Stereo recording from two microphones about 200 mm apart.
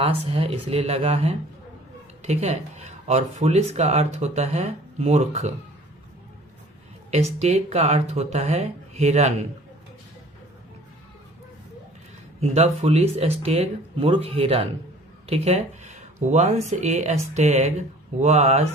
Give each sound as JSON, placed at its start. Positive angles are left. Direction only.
{"t": 0.0, "sound": "speech", "side_deg": -30}
{"t": 7.1, "sound": "speech", "side_deg": -35}
{"t": 12.4, "sound": "speech", "side_deg": -30}